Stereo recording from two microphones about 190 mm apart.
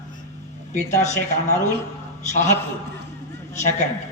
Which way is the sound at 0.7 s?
35° left (ahead or behind).